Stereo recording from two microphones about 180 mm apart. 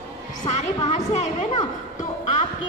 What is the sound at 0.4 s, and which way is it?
A woman's voice, 35° left (ahead or behind).